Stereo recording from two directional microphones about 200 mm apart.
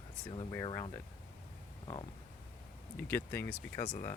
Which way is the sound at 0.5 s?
15° left (ahead or behind).